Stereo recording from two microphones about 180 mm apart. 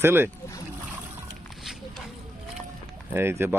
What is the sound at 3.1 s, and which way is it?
Speech, 10° right (ahead or behind).